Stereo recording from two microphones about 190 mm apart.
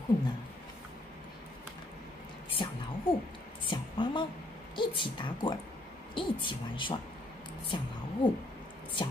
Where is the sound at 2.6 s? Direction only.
25° left (ahead or behind).